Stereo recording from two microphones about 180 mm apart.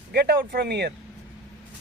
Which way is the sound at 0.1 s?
60° right (ahead or behind).